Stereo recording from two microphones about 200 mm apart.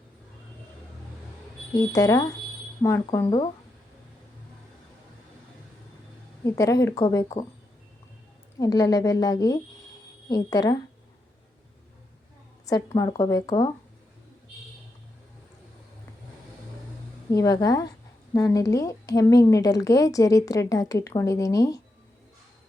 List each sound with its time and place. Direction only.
1.9 s speech: 15° left (ahead or behind)
6.4 s speech: 15° left (ahead or behind)
8.5 s speech: 15° left (ahead or behind)
12.6 s speech: 15° left (ahead or behind)
17.3 s speech: 15° left (ahead or behind)